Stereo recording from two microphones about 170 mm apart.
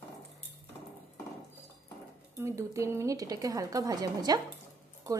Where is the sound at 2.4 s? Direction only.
15° right (ahead or behind).